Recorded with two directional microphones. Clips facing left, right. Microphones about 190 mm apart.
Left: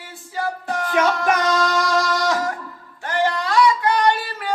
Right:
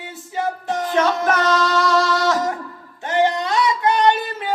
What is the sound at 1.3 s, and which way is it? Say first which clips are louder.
Music: right 1 dB; 10° left (ahead or behind).